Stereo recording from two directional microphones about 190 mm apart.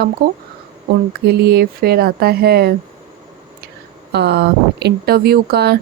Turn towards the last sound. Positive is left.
turn(degrees=-55)  # may be behind; listen again after turning